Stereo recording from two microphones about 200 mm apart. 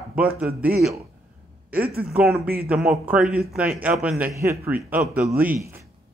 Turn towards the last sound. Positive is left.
turn(degrees=-10)  # may be behind; listen again after turning